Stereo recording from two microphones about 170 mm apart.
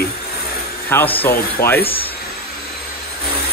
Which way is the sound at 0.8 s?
10° left (ahead or behind).